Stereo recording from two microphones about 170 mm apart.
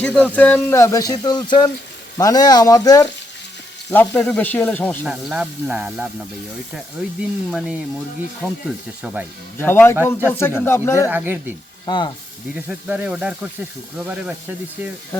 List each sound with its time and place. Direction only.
0.0 s speech: 10° left (ahead or behind)
3.9 s speech: 5° left (ahead or behind)
5.0 s speech: 5° right (ahead or behind)
9.6 s speech: 15° left (ahead or behind)
11.1 s speech: 10° right (ahead or behind)
11.9 s speech: 30° left (ahead or behind)
12.5 s speech: 10° right (ahead or behind)